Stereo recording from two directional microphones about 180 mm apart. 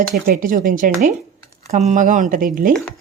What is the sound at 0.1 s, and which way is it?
Speech, 50° right (ahead or behind).